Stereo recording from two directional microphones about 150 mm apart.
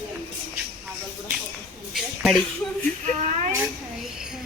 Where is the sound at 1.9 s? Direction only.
Centre (ahead or behind).